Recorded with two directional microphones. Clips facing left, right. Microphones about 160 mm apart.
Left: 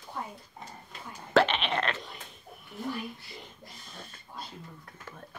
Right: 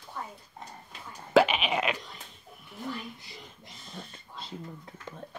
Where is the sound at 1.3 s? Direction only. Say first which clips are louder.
Right 2 dB; 10° right (ahead or behind).